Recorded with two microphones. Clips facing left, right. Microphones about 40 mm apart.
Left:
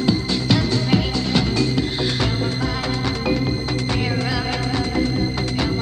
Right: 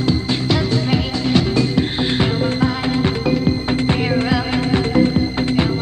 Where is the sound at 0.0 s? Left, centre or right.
Centre.